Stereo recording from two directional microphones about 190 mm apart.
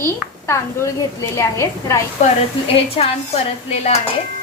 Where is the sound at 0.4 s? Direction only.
15° left (ahead or behind).